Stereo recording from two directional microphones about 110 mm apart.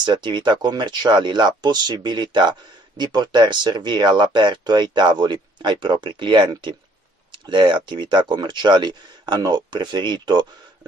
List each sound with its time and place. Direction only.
0.0 s speech: 45° right (ahead or behind)